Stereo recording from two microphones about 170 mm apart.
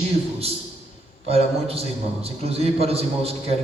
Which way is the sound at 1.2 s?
35° right (ahead or behind).